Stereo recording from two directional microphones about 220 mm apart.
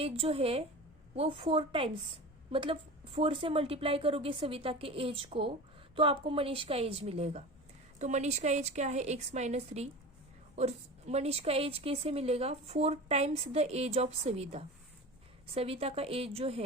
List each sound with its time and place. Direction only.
0.0 s a woman's voice: 25° right (ahead or behind)